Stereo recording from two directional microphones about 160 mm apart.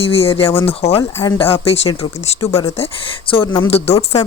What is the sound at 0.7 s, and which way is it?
Speech, 40° left (ahead or behind).